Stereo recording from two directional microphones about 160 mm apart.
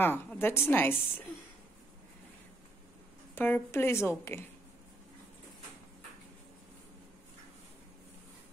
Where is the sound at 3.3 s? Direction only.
10° left (ahead or behind).